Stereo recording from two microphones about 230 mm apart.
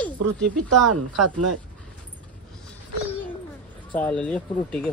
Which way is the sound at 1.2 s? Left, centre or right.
Right.